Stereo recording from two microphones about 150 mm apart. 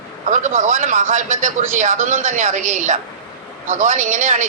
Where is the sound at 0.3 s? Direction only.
55° right (ahead or behind).